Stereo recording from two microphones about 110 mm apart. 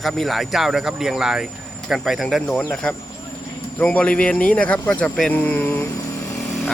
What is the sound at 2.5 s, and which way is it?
Speech, 10° left (ahead or behind).